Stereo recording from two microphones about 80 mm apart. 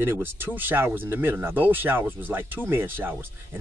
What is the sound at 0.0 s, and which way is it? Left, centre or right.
Speech, right.